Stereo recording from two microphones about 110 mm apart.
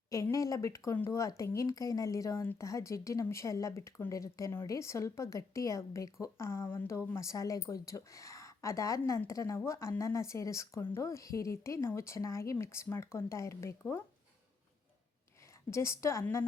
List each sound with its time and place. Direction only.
0.1 s speech: 30° left (ahead or behind)
15.7 s speech: 25° left (ahead or behind)